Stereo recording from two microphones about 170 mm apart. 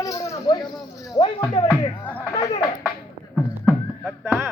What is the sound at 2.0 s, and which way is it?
Speech, 10° left (ahead or behind).